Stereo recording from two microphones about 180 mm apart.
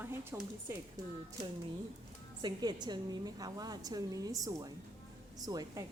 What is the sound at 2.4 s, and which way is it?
A woman's voice, 25° right (ahead or behind).